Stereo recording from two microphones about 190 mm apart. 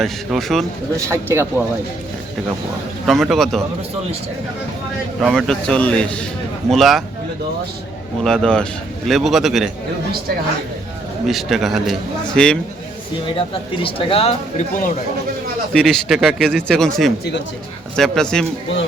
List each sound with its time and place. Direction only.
0.0 s speech: centre (ahead or behind)
1.0 s a man's voice: 15° right (ahead or behind)
3.1 s speech: centre (ahead or behind)
5.2 s speech: centre (ahead or behind)
8.2 s speech: 5° left (ahead or behind)
11.3 s speech: centre (ahead or behind)
13.8 s speech: 30° left (ahead or behind)
15.7 s speech: centre (ahead or behind)